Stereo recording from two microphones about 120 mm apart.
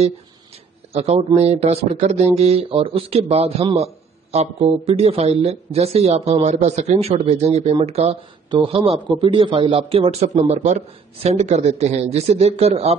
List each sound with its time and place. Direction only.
0.9 s a man's voice: 60° right (ahead or behind)
8.5 s a man's voice: 45° right (ahead or behind)
10.4 s a man's voice: 70° right (ahead or behind)